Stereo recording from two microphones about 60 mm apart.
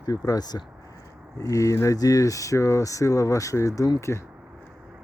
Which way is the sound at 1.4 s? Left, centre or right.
Left.